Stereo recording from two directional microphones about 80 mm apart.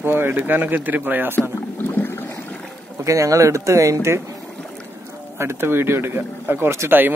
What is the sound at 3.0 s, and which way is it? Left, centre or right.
A man's voice, right.